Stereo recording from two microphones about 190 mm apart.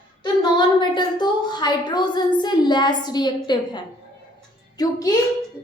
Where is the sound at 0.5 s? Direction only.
25° left (ahead or behind).